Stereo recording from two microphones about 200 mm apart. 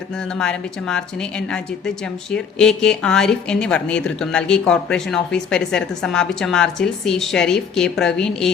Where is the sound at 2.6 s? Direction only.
5° left (ahead or behind).